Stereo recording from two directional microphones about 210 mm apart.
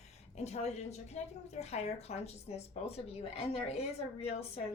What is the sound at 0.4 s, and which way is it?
A woman's voice, 30° left (ahead or behind).